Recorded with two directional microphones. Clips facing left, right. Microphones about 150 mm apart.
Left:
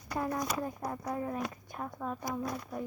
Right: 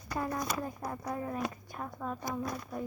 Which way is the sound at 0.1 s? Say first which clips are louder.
Left 1 dB; 15° left (ahead or behind).